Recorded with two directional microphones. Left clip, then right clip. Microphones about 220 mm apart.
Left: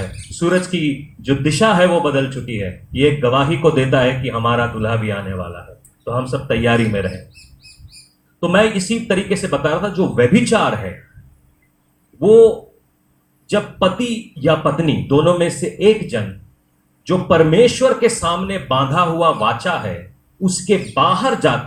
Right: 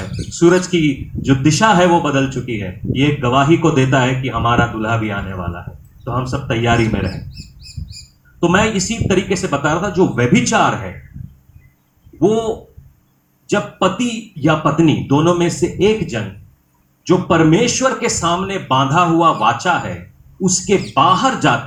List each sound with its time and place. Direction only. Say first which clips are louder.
0.2 s speech: right 5 dB; 40° right (ahead or behind)
6.2 s speech: even; 40° right (ahead or behind)
8.4 s speech: even; 40° right (ahead or behind)
13.5 s speech: even; 40° right (ahead or behind)